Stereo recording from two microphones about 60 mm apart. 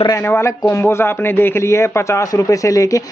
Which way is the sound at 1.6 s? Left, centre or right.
Left.